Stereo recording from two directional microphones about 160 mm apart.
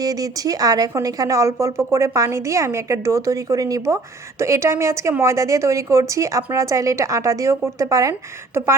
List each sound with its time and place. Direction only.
0.0 s speech: 25° right (ahead or behind)